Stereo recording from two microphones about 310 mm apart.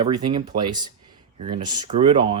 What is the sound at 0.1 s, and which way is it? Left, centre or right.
Speech, centre.